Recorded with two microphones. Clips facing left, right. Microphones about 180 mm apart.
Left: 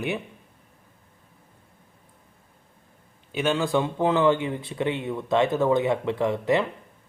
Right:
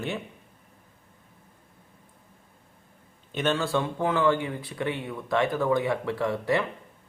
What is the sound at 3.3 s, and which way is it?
Speech, 10° left (ahead or behind).